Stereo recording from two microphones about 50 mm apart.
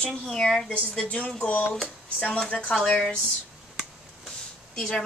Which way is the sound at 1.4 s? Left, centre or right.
Left.